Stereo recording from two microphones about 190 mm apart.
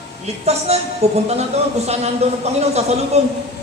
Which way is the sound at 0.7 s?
35° right (ahead or behind).